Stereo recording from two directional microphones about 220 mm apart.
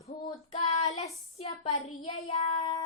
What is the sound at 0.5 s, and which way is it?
Child singing, 30° left (ahead or behind).